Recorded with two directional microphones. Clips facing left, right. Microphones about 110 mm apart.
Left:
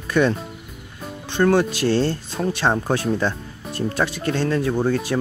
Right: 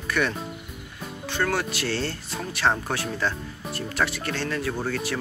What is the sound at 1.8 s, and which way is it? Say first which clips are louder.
Speech: left 9 dB; 40° left (ahead or behind).